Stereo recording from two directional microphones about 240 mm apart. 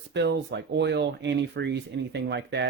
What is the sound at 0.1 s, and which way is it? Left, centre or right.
Speech, right.